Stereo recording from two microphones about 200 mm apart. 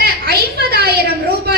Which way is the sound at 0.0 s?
50° right (ahead or behind).